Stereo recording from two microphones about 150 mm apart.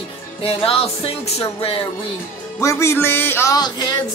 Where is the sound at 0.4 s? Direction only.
40° left (ahead or behind).